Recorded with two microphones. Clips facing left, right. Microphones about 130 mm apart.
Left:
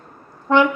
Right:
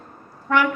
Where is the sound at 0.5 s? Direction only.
25° left (ahead or behind).